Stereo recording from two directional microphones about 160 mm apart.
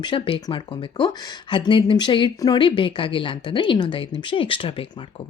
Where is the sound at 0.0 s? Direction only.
30° left (ahead or behind).